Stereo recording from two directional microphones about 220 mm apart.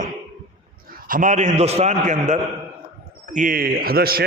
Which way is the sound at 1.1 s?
35° right (ahead or behind).